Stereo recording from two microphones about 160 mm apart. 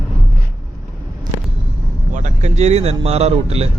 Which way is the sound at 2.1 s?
45° right (ahead or behind).